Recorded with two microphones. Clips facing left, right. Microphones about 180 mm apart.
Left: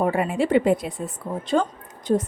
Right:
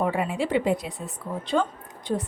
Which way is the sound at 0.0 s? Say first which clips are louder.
Left 4 dB; 50° left (ahead or behind).